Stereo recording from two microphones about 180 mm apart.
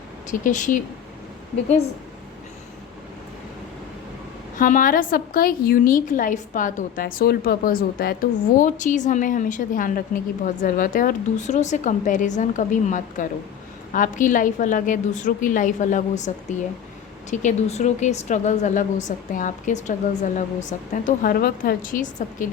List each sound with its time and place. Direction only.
0.3 s a woman's voice: 45° left (ahead or behind)
4.5 s a woman's voice: 45° left (ahead or behind)